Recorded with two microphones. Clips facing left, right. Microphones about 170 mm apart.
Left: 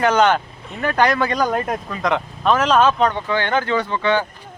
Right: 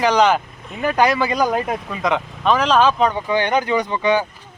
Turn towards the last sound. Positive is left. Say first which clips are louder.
# right 1 dB
turn(degrees=-15)  # may be behind; listen again after turning